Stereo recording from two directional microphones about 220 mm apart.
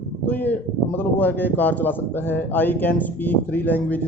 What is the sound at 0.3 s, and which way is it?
Speech, 5° left (ahead or behind).